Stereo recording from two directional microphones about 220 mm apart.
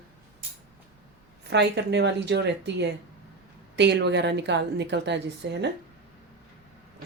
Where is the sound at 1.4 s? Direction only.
50° right (ahead or behind).